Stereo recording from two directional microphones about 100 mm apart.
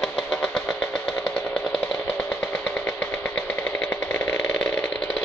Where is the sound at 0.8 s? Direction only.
5° left (ahead or behind).